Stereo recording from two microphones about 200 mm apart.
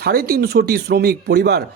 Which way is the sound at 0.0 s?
50° right (ahead or behind).